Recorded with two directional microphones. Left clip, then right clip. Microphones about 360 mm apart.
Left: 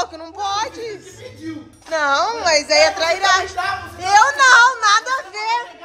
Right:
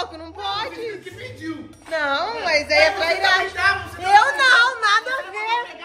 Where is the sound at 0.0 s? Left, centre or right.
Centre.